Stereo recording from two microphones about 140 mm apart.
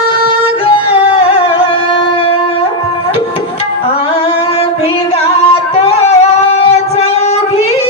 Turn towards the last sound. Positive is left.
turn(degrees=50)  # may be behind; listen again after turning